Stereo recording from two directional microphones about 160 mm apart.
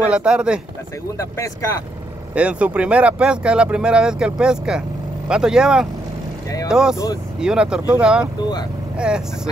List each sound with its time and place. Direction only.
0.1 s speech: 5° right (ahead or behind)
1.1 s speech: 20° left (ahead or behind)
2.3 s speech: 5° right (ahead or behind)